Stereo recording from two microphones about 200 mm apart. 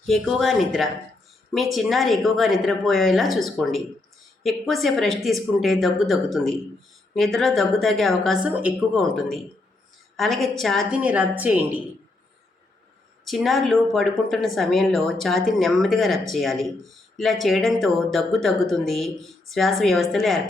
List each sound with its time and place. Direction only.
0.0 s speech: centre (ahead or behind)
13.2 s speech: centre (ahead or behind)